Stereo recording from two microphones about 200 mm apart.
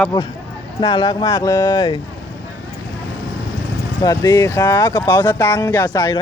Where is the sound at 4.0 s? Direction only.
20° left (ahead or behind).